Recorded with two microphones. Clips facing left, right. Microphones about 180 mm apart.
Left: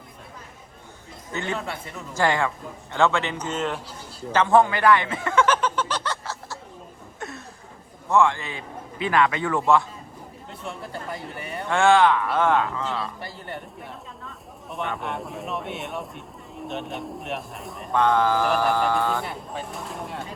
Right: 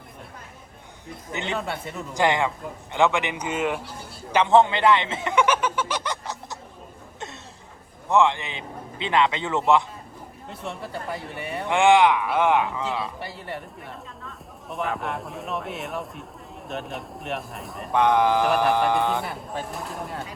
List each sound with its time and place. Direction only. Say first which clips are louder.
1.3 s a man's voice: even; 20° right (ahead or behind)
4.3 s a sound: right 1 dB; 15° right (ahead or behind)
8.1 s a man's voice: even; 20° right (ahead or behind)
10.7 s speech: right 2 dB; centre (ahead or behind)
11.7 s speech: even; 15° right (ahead or behind)
13.1 s speech: right 1 dB; centre (ahead or behind)
17.9 s a man's voice: right 1 dB; 15° right (ahead or behind)
19.2 s speech: right 1 dB; centre (ahead or behind)